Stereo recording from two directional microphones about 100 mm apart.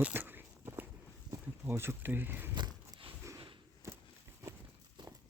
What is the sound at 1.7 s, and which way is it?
Speech, 25° right (ahead or behind).